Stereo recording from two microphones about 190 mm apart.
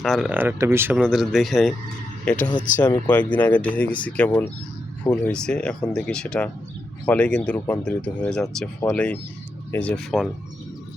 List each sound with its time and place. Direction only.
0.0 s speech: centre (ahead or behind)